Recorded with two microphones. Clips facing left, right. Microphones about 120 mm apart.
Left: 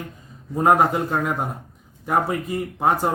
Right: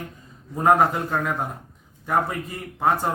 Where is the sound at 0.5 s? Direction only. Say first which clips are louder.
Left 1 dB; 15° left (ahead or behind).